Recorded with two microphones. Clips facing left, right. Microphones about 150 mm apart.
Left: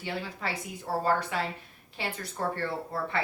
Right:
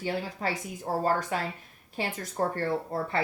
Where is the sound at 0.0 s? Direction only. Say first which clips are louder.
Right 4 dB; 40° right (ahead or behind).